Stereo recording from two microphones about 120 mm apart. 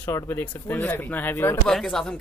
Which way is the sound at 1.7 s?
5° left (ahead or behind).